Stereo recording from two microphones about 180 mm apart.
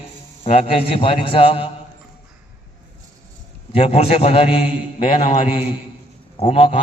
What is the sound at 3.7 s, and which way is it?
Speech, 35° left (ahead or behind).